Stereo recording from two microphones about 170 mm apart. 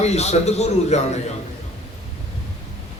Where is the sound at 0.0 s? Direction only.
40° left (ahead or behind).